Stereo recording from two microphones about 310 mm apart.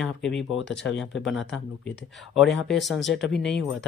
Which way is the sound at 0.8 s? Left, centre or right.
Left.